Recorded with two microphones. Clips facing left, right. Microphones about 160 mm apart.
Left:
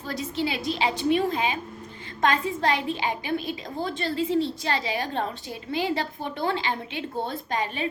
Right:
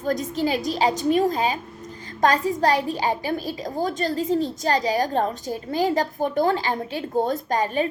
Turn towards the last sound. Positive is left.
turn(degrees=-40)  # may be behind; listen again after turning